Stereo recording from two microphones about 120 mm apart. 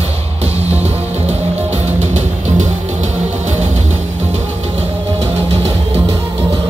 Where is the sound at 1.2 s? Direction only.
70° right (ahead or behind).